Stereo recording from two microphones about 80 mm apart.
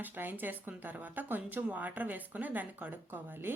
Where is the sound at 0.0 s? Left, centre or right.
Right.